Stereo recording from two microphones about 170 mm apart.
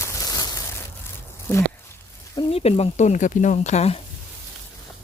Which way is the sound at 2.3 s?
35° left (ahead or behind).